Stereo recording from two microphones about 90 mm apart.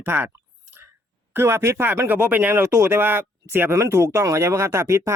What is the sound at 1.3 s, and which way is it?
Speech, 25° right (ahead or behind).